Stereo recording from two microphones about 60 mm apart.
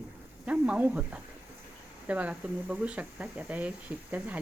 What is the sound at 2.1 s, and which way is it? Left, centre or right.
Speech, right.